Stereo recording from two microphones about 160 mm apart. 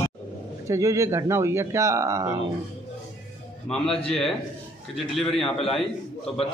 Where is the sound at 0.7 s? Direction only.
20° right (ahead or behind).